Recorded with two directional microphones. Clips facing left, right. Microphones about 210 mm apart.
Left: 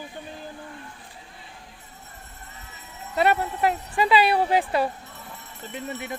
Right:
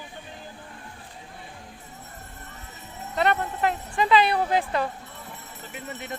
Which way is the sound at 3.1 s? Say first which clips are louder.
Left 2 dB; 10° left (ahead or behind).